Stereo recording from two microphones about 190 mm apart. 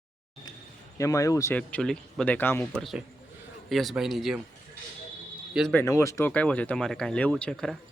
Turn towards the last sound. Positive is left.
turn(degrees=5)  # may be behind; listen again after turning